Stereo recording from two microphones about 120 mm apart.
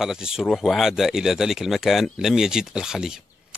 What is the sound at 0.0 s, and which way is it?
Speech, 5° right (ahead or behind).